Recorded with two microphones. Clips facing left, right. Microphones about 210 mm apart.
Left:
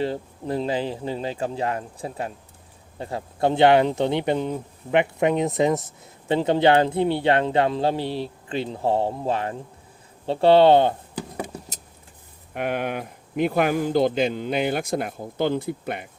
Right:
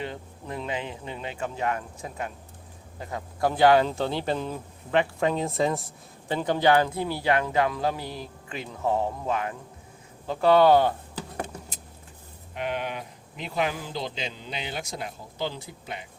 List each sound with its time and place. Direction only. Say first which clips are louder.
0.0 s speech: left 9 dB; 35° left (ahead or behind)
12.5 s speech: left 5 dB; 55° left (ahead or behind)